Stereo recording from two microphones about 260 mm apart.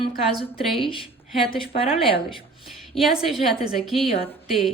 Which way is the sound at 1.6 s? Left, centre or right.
Left.